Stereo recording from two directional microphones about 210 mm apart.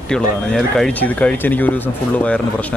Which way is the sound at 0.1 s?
Centre (ahead or behind).